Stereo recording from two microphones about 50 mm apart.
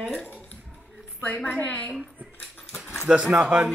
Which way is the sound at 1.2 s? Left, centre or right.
Left.